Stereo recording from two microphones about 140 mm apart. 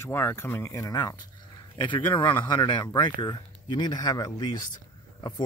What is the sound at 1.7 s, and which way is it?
Speech, 35° left (ahead or behind).